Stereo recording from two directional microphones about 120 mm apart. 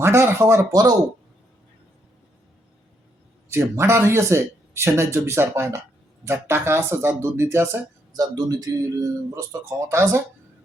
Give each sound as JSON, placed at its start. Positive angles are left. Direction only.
{"t": 0.0, "sound": "speech", "side_deg": -20}
{"t": 3.5, "sound": "speech", "side_deg": -25}